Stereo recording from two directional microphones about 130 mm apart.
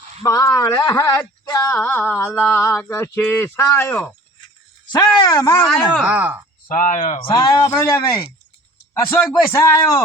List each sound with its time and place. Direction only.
0.3 s speech: 25° left (ahead or behind)
1.8 s a sound: 15° left (ahead or behind)
3.4 s speech: 20° left (ahead or behind)
4.9 s speech: 30° left (ahead or behind)
6.0 s speech: 10° right (ahead or behind)
6.7 s speech: 85° left
7.2 s speech: 40° left (ahead or behind)
7.6 s speech: 20° left (ahead or behind)